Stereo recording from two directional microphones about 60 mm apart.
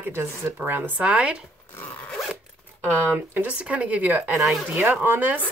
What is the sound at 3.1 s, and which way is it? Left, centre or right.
Speech, right.